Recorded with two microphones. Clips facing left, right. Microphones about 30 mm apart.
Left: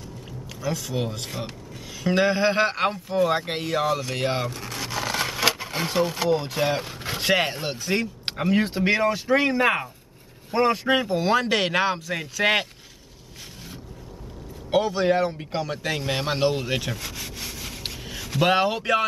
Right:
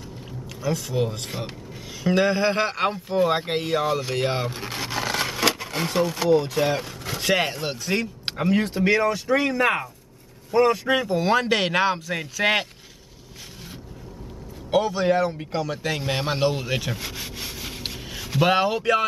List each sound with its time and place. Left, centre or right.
0.6 s a man's voice: centre
3.1 s speech: centre
3.4 s a man's voice: centre
3.7 s a man's voice: centre
4.5 s a sound: right; by 5.7 s centre
5.8 s speech: centre
7.8 s speech: centre
8.6 s speech: centre
11.1 s a man's voice: centre
14.7 s a man's voice: centre
16.9 s rub: centre